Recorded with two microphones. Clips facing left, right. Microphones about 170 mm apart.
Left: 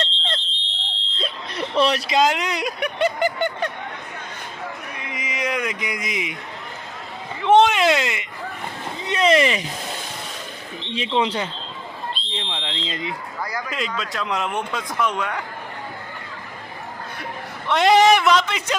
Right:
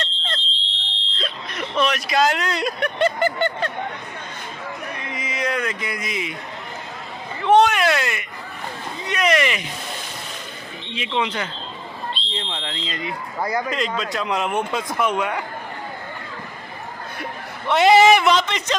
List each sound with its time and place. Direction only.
0.0 s smoke detector: 30° left (ahead or behind)
0.9 s fire alarm: centre (ahead or behind)
1.5 s speech: 30° left (ahead or behind); by 3.7 s 15° left (ahead or behind)
4.9 s a sound: 10° left (ahead or behind)
7.4 s speech: 20° left (ahead or behind)
10.9 s speech: 35° left (ahead or behind)
12.1 s a sound: centre (ahead or behind)
12.9 s speech: 20° left (ahead or behind)
13.4 s a man's voice: 25° right (ahead or behind)
13.7 s speech: 5° left (ahead or behind)
17.7 s speech: 5° right (ahead or behind)